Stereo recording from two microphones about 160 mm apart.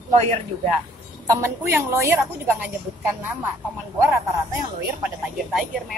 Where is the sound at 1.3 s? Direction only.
15° right (ahead or behind).